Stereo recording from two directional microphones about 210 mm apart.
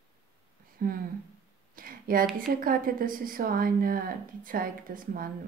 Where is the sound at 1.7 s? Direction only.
45° right (ahead or behind).